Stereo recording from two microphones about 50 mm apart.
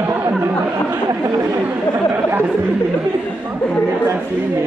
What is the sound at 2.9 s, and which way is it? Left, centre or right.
Speech, right.